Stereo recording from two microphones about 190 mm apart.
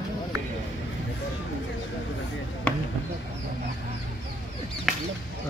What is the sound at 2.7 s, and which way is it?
Basketball bounce, 5° left (ahead or behind).